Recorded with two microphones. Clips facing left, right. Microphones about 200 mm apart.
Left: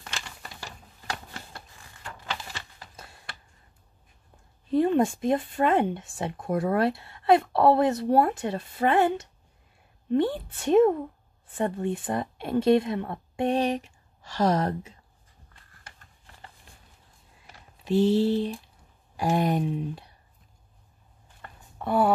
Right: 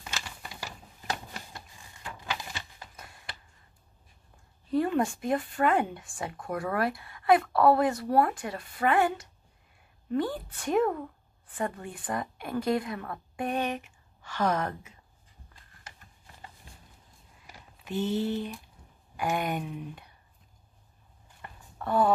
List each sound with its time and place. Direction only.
2.1 s a sound: 15° right (ahead or behind)
4.6 s a woman's voice: 25° left (ahead or behind)
17.8 s speech: 30° left (ahead or behind)
21.7 s speech: 10° left (ahead or behind)